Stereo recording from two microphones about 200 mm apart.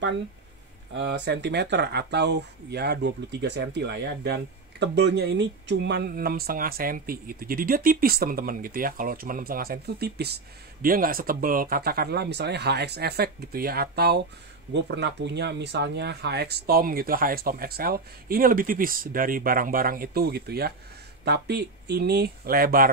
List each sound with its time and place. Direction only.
0.9 s speech: 60° right (ahead or behind)